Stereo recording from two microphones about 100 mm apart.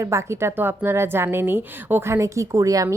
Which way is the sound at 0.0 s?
30° right (ahead or behind).